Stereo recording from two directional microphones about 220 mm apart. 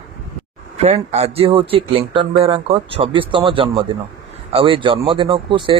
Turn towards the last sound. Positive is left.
turn(degrees=-20)  # may be behind; listen again after turning